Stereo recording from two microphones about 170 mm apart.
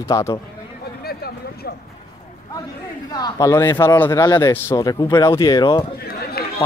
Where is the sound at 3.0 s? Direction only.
25° left (ahead or behind).